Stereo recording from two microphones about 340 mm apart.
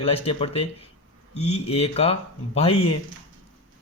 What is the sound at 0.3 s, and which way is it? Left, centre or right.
A man's voice, centre.